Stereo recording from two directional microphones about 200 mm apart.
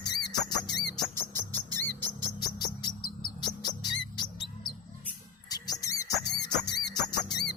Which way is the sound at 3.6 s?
20° left (ahead or behind).